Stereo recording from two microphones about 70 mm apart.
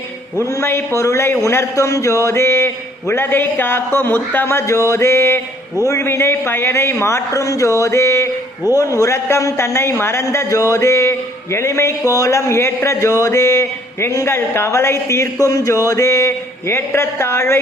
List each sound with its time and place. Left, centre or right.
0.5 s a man's voice: left